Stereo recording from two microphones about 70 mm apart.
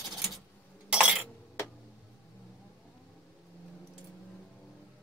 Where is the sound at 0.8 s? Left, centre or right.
Centre.